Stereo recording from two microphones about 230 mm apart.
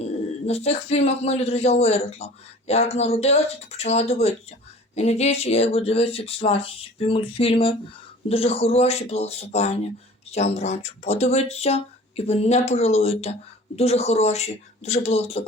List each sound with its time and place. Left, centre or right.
0.4 s a man's voice: left